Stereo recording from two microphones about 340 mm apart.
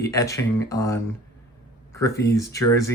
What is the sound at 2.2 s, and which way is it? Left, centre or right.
Speech, centre.